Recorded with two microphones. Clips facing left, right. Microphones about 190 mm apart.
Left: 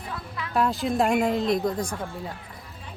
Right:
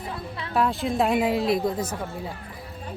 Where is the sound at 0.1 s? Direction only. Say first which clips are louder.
Left 2 dB; 30° right (ahead or behind).